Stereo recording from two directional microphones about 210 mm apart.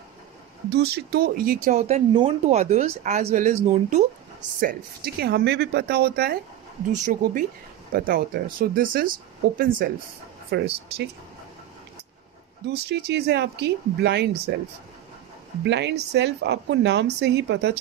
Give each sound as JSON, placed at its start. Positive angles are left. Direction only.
{"t": 0.7, "sound": "speech", "side_deg": -50}
{"t": 4.6, "sound": "a woman's voice", "side_deg": -45}
{"t": 12.6, "sound": "a woman's voice", "side_deg": -50}
{"t": 15.6, "sound": "speech", "side_deg": -55}